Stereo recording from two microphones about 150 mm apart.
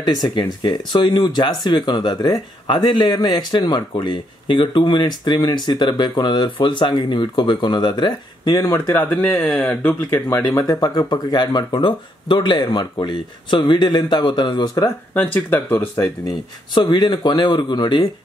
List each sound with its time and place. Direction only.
0.0 s speech: 30° left (ahead or behind)
8.7 s speech: 15° left (ahead or behind)
10.7 s speech: 25° left (ahead or behind)
15.1 s speech: 10° left (ahead or behind)
16.0 s speech: 25° left (ahead or behind)